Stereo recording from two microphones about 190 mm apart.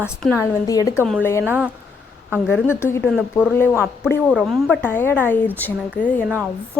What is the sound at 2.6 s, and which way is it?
Speech, 15° left (ahead or behind).